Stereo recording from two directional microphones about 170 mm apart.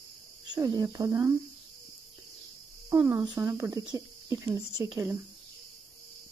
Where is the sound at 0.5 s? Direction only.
25° right (ahead or behind).